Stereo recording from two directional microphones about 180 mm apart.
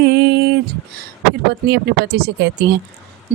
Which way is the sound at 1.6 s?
60° right (ahead or behind).